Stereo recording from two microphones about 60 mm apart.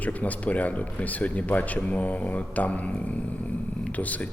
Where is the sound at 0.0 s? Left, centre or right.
Left.